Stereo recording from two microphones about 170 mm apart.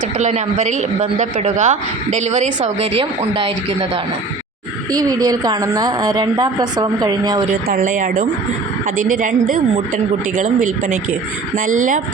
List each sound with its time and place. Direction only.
0.2 s a woman's voice: 40° right (ahead or behind); by 7.4 s 25° right (ahead or behind)
7.7 s a woman's voice: 50° right (ahead or behind)